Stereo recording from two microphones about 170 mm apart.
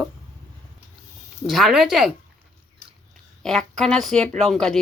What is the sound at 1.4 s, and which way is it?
Speech, centre (ahead or behind).